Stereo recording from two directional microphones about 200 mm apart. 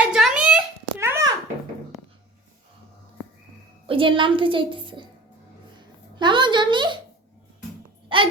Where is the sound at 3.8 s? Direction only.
25° right (ahead or behind).